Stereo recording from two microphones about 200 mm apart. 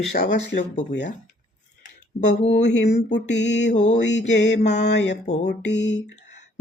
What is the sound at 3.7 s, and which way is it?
Speech, 35° left (ahead or behind).